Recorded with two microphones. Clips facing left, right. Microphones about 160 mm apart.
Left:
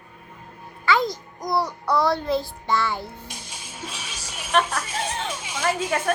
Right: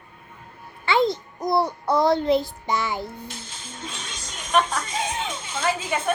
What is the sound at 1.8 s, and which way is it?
Child singing, 20° right (ahead or behind).